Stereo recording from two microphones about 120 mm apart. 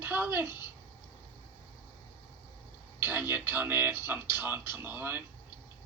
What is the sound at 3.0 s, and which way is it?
Speech, 20° right (ahead or behind).